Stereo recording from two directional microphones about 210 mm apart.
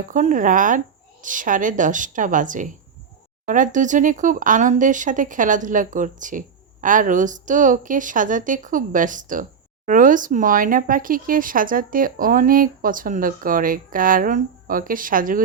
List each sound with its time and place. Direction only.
0.1 s a woman's voice: 40° right (ahead or behind)